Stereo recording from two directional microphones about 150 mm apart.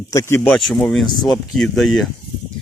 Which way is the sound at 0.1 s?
20° left (ahead or behind).